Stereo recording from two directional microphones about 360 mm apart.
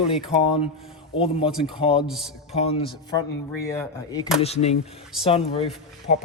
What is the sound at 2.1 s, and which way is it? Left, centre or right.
Speech, centre.